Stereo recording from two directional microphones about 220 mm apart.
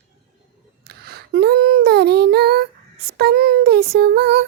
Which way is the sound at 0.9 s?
45° right (ahead or behind).